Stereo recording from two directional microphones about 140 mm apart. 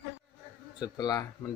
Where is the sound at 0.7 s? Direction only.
30° left (ahead or behind).